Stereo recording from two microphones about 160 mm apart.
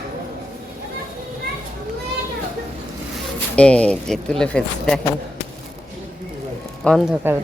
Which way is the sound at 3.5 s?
5° left (ahead or behind).